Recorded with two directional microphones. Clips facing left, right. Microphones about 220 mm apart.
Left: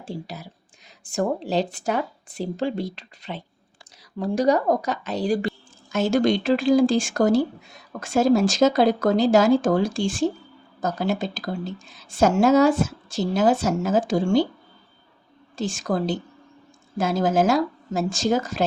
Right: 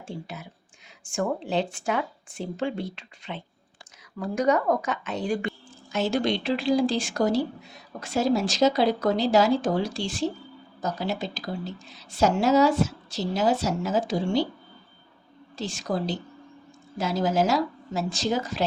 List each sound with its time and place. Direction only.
0.0 s a woman's voice: 35° left (ahead or behind)
15.5 s a woman's voice: 50° left (ahead or behind)